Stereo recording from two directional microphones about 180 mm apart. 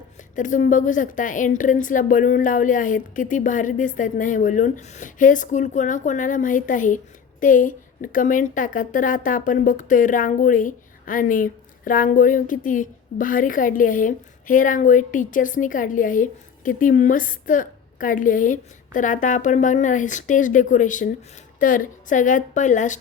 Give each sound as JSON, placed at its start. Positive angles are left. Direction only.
{"t": 0.3, "sound": "a woman's voice", "side_deg": 45}